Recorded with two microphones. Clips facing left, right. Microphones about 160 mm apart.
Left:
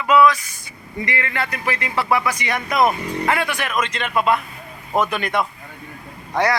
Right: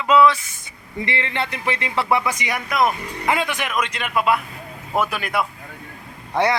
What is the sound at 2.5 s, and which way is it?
Speech, 5° right (ahead or behind).